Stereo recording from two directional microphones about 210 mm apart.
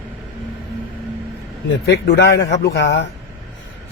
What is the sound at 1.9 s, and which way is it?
A man's voice, 55° left (ahead or behind).